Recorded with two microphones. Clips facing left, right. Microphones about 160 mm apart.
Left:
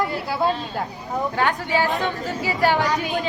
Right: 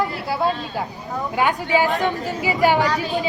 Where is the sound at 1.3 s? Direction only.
15° right (ahead or behind).